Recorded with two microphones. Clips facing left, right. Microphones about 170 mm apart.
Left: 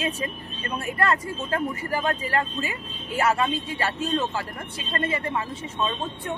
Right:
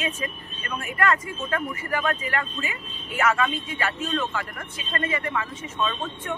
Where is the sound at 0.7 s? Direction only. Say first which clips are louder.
Even; 30° left (ahead or behind).